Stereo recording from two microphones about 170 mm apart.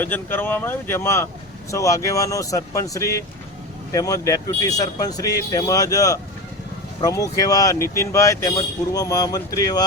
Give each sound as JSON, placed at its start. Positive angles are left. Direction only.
{"t": 0.0, "sound": "speech", "side_deg": 10}